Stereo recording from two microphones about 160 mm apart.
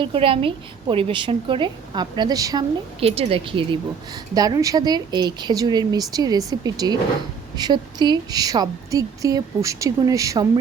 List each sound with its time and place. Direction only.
0.0 s a woman's voice: 35° right (ahead or behind)
3.0 s a woman's voice: 35° right (ahead or behind); by 10.6 s 20° right (ahead or behind)